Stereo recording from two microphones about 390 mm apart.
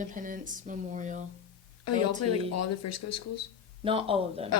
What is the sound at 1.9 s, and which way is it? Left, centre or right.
Speech, left.